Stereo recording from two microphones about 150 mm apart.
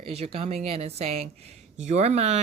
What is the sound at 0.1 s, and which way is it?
Speech, 45° right (ahead or behind).